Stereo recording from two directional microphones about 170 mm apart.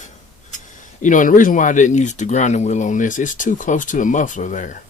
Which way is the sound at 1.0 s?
50° left (ahead or behind).